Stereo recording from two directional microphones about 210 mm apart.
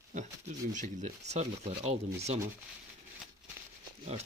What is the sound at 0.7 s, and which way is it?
Speech, 35° right (ahead or behind).